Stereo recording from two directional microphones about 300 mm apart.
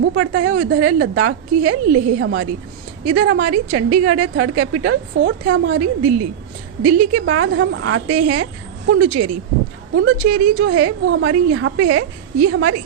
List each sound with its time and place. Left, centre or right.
0.2 s a woman's voice: right
9.9 s a woman's voice: right